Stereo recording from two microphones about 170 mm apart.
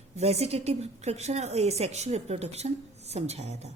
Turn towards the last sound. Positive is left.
turn(degrees=-40)  # may be behind; listen again after turning